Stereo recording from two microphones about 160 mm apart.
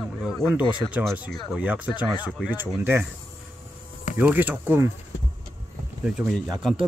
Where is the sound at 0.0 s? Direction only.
Centre (ahead or behind).